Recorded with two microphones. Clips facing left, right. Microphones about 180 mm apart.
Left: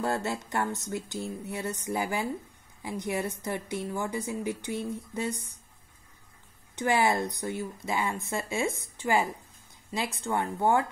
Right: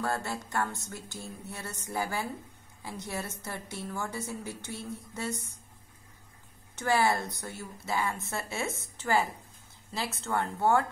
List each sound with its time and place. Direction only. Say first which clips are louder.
0.0 s a woman's voice: left 3 dB; 20° left (ahead or behind)
6.7 s a woman's voice: left 2 dB; 15° left (ahead or behind)